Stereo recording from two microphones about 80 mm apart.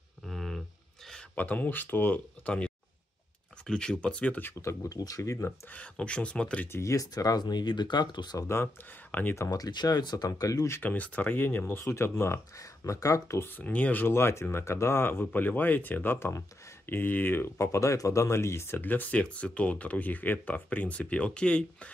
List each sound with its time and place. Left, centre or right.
0.2 s a sound: centre
1.3 s speech: left
4.6 s speech: left
5.7 s speech: centre
6.7 s speech: left
9.1 s speech: left
9.8 s speech: left
10.7 s speech: left
11.8 s speech: left
13.6 s speech: centre
14.0 s speech: left; by 21.9 s centre